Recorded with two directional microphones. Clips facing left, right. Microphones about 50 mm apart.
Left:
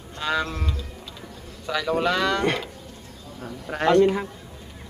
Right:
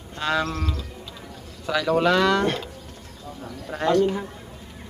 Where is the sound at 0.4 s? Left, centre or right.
Centre.